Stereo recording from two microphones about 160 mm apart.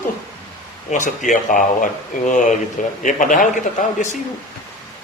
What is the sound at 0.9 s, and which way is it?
Speech, 50° left (ahead or behind).